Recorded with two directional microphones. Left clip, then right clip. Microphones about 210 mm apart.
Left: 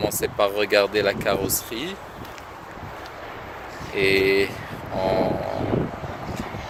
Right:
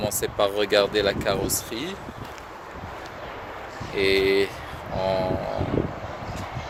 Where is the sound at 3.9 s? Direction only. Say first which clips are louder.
Left 2 dB; centre (ahead or behind).